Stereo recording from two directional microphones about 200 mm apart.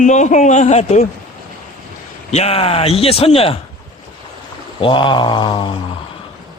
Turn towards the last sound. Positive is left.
turn(degrees=25)  # may be behind; listen again after turning